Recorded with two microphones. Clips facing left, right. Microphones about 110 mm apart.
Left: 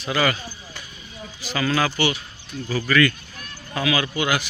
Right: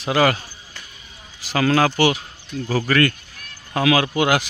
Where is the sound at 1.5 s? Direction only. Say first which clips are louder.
Right 5 dB; 65° right (ahead or behind).